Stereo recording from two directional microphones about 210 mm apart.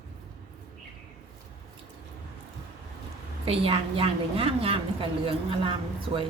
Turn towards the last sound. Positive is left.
turn(degrees=-25)  # may be behind; listen again after turning